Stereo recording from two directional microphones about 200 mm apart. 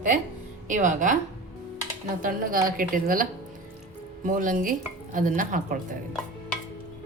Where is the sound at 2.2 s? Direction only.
45° right (ahead or behind).